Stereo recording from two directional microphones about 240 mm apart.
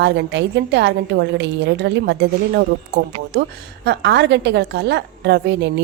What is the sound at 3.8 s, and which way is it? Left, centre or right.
Speech, right.